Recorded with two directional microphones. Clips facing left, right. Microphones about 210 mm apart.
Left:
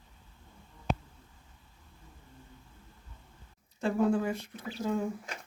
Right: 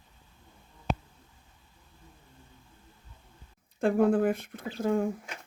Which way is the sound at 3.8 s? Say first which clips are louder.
Right 4 dB; 55° right (ahead or behind).